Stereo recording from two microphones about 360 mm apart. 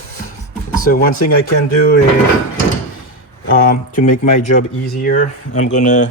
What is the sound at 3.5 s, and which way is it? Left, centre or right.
Speech, left.